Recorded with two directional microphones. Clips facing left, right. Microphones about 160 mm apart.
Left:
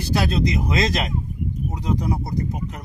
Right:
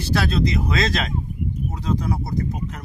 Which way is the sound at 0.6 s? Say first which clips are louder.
Left 1 dB; 15° left (ahead or behind).